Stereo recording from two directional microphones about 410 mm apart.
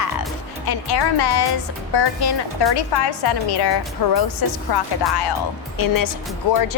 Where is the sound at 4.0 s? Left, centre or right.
Left.